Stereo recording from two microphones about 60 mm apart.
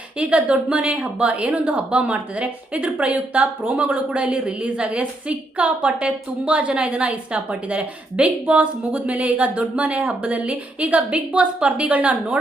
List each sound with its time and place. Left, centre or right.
0.2 s a woman's voice: right